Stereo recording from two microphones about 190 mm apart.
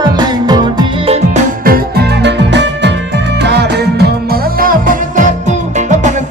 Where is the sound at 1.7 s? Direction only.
60° right (ahead or behind).